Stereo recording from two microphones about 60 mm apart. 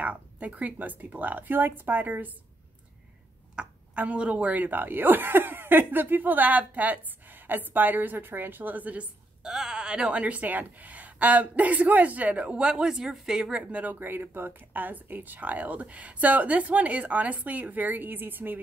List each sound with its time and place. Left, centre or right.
0.0 s speech: right
3.5 s speech: right
9.4 s speech: centre
13.9 s speech: right